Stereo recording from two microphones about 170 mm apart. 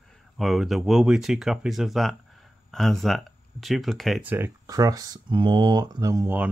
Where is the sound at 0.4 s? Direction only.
Centre (ahead or behind).